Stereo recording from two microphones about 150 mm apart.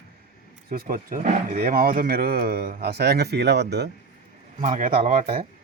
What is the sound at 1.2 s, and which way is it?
Speech, 55° right (ahead or behind).